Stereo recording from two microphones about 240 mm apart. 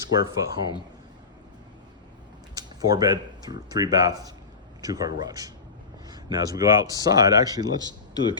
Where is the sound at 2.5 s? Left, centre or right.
Centre.